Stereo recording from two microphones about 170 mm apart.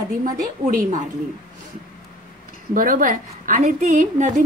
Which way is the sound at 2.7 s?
55° right (ahead or behind).